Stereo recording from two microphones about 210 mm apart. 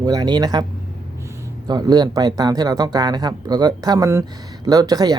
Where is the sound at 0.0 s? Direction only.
20° right (ahead or behind).